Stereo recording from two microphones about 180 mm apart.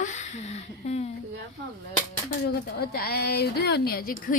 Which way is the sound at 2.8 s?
60° left (ahead or behind).